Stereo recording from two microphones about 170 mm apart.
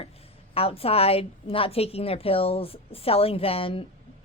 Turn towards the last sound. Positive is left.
turn(degrees=30)  # may be behind; listen again after turning